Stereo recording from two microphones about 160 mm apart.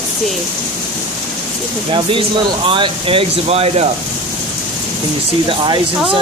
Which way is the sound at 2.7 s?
35° right (ahead or behind).